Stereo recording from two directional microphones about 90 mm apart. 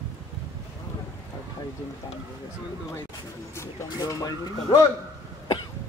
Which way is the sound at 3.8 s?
50° left (ahead or behind).